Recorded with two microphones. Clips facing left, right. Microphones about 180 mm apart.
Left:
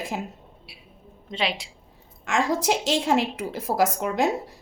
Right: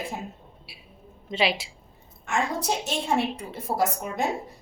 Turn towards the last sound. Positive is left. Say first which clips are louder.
# left 4 dB
turn(degrees=80)